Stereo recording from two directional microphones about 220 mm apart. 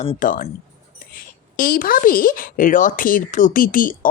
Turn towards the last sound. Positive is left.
turn(degrees=40)  # may be behind; listen again after turning